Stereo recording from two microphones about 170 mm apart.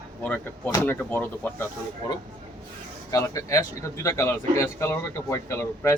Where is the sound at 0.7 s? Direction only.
20° left (ahead or behind).